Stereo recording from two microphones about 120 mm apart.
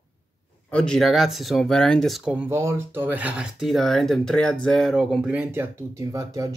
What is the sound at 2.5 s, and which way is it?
Speech, 25° right (ahead or behind).